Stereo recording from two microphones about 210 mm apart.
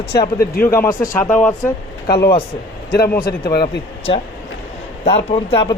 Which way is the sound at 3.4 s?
25° left (ahead or behind).